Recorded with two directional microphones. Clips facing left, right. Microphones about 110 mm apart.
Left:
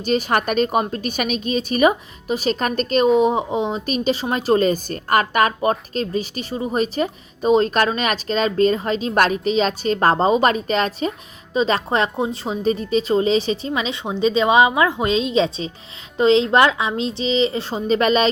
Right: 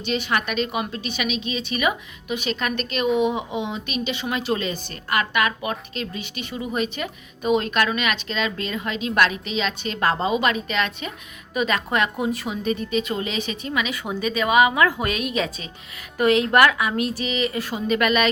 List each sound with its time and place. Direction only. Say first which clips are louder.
0.0 s a woman's voice: left 5 dB; 40° left (ahead or behind)